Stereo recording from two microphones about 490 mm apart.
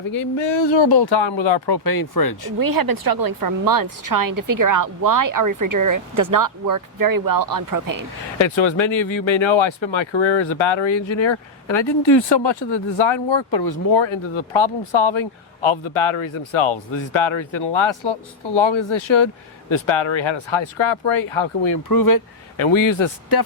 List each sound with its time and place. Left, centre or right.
0.3 s speech: left
1.7 s speech: left
2.6 s a woman's voice: right
8.4 s speech: left
21.7 s speech: left
22.5 s speech: left